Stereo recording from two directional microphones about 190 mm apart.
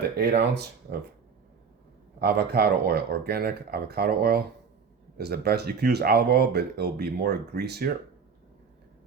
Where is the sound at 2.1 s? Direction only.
55° right (ahead or behind).